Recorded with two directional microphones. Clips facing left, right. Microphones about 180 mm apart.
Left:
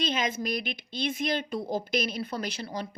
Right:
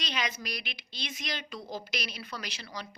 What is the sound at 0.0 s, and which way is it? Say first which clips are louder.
Speech: left 7 dB; 50° left (ahead or behind).